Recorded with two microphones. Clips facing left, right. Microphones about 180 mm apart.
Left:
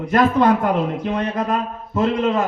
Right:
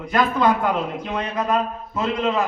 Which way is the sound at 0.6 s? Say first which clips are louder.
Left 3 dB; 50° left (ahead or behind).